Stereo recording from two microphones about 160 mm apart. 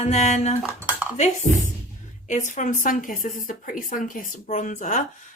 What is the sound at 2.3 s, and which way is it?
A woman's voice, 50° left (ahead or behind).